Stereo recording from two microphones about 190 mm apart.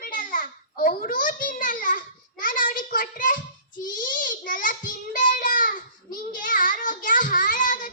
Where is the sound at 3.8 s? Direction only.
45° left (ahead or behind).